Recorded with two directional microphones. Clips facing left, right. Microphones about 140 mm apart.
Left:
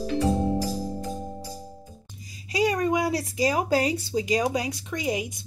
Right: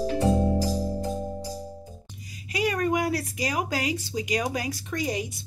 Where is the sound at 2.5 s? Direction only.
25° left (ahead or behind).